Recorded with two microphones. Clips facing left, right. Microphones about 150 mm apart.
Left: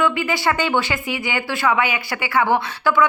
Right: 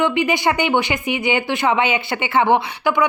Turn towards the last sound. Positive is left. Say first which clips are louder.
# even
turn(degrees=-20)  # may be behind; listen again after turning